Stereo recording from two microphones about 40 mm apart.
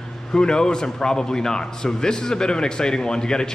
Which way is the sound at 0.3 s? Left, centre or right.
Centre.